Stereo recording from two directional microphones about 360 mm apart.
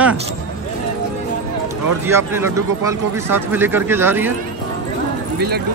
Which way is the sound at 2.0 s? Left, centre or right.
Centre.